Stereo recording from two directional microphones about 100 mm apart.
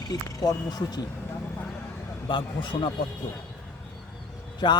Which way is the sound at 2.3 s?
55° left (ahead or behind).